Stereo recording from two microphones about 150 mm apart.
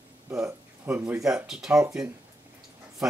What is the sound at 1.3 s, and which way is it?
Speech, 5° right (ahead or behind).